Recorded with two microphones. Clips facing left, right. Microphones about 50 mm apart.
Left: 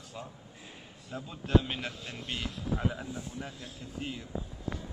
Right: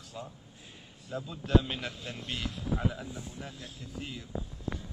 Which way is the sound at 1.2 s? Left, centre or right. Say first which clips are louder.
Even; left.